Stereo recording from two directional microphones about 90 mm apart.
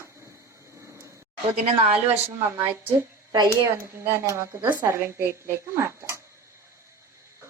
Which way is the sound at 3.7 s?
30° right (ahead or behind).